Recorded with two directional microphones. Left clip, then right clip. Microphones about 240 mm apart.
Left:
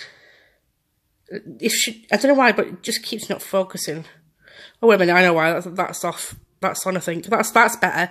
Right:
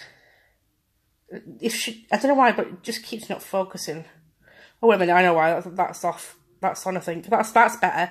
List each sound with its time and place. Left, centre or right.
1.3 s speech: left